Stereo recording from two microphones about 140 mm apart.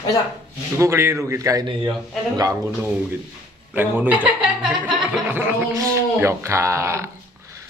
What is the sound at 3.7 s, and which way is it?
A man's voice, 10° right (ahead or behind).